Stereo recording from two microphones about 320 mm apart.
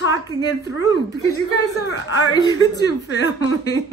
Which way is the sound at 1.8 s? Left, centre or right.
Left.